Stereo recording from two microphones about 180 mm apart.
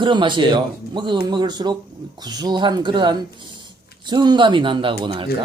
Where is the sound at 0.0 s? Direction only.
25° right (ahead or behind).